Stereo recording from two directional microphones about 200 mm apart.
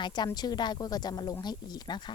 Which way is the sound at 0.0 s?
20° left (ahead or behind).